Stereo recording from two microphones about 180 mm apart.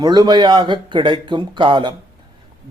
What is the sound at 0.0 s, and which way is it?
A man's voice, 25° right (ahead or behind).